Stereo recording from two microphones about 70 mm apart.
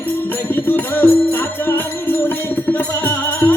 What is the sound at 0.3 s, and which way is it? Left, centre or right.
Music, left.